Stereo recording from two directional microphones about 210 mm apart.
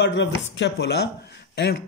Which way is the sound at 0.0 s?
60° left (ahead or behind).